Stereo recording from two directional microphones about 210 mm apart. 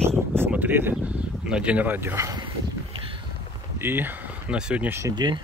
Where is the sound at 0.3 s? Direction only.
10° right (ahead or behind).